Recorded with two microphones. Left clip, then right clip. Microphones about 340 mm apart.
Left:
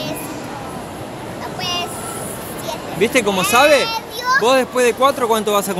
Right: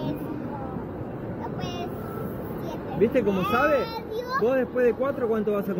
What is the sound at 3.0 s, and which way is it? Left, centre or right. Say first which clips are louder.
Speech: left 7 dB; left.